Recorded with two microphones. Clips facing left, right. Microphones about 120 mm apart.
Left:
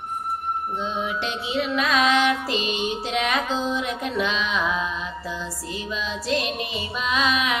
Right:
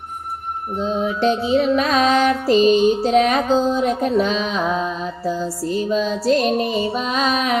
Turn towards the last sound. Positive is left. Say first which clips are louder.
# right 4 dB
turn(degrees=-40)  # may be behind; listen again after turning